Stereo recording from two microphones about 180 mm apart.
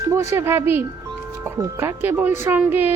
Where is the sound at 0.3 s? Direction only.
15° right (ahead or behind).